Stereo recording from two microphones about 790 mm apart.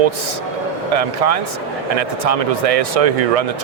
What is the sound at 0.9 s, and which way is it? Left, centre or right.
Speech, right.